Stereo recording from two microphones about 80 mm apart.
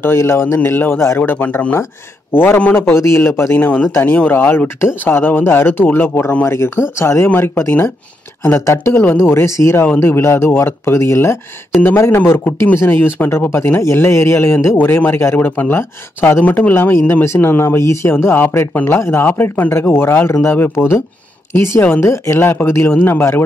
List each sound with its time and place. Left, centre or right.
0.0 s speech: left
3.5 s speech: left
9.8 s speech: left